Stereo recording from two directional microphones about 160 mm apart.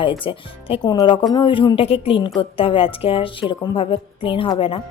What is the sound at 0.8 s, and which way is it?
A woman's voice, 25° left (ahead or behind).